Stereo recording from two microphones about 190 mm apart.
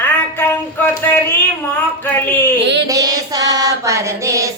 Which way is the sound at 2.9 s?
20° right (ahead or behind).